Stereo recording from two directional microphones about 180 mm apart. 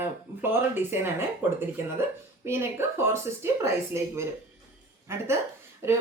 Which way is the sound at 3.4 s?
15° right (ahead or behind).